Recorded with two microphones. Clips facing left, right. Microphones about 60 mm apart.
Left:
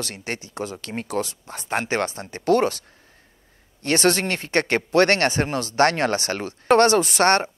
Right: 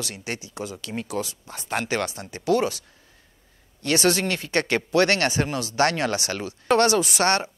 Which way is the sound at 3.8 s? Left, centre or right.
Left.